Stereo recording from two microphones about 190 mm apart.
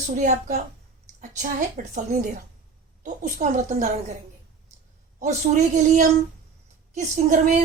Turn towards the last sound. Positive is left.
turn(degrees=-40)  # may be behind; listen again after turning